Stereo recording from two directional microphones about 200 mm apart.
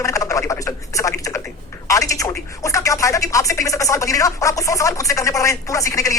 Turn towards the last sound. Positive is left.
turn(degrees=15)  # may be behind; listen again after turning